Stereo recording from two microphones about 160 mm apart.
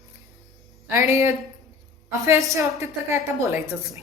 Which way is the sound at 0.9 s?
15° right (ahead or behind).